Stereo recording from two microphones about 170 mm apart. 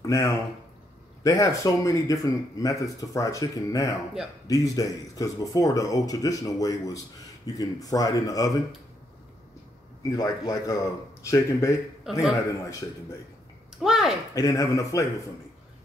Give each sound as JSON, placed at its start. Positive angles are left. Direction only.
{"t": 0.0, "sound": "speech", "side_deg": 20}
{"t": 10.0, "sound": "speech", "side_deg": 20}
{"t": 12.0, "sound": "a man's voice", "side_deg": -5}
{"t": 13.7, "sound": "speech", "side_deg": 0}
{"t": 14.3, "sound": "speech", "side_deg": 20}